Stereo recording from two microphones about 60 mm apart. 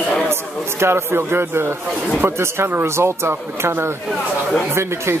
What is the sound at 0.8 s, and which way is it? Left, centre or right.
Speech, right.